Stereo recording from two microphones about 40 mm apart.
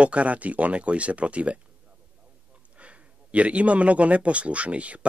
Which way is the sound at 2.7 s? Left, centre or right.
Right.